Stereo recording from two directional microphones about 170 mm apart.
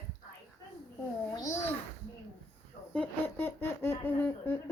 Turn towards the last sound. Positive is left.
turn(degrees=10)  # may be behind; listen again after turning